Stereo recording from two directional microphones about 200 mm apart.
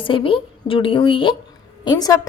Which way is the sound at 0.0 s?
25° left (ahead or behind).